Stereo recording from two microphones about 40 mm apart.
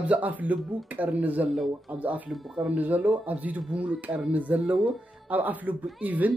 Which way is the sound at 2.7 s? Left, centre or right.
Right.